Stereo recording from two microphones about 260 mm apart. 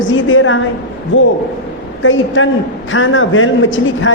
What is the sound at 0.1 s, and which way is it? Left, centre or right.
A woman's voice, left.